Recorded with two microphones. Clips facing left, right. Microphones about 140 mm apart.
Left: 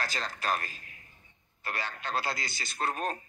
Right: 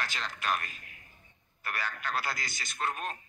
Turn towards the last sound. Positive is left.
turn(degrees=35)  # may be behind; listen again after turning